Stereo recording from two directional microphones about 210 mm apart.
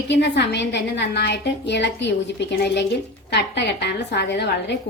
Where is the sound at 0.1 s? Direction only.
55° left (ahead or behind).